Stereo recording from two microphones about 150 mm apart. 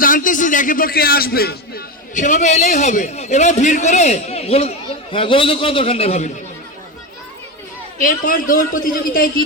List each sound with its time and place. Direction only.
0.0 s a man's voice: 65° left (ahead or behind); by 6.3 s 45° left (ahead or behind)
7.9 s a man's voice: 60° left (ahead or behind)